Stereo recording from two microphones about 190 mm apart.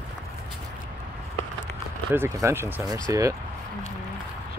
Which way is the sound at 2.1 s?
10° right (ahead or behind).